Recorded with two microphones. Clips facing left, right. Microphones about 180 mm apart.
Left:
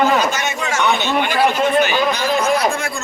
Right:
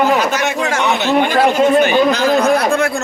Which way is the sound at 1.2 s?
45° right (ahead or behind).